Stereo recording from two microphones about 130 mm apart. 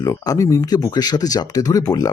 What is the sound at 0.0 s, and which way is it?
Speech, 25° left (ahead or behind).